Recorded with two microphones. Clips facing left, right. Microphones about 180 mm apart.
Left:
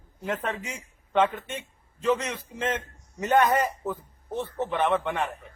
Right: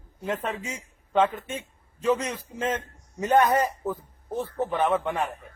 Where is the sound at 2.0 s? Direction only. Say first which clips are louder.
Right 1 dB; 10° right (ahead or behind).